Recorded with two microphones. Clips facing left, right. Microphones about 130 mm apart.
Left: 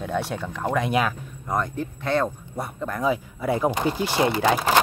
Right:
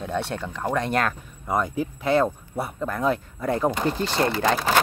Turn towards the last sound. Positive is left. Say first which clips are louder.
# left 1 dB
turn(degrees=10)  # may be behind; listen again after turning